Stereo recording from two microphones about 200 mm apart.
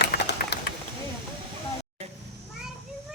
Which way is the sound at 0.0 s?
55° left (ahead or behind).